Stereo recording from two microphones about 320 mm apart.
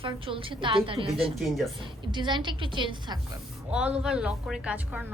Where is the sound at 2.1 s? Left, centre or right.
Centre.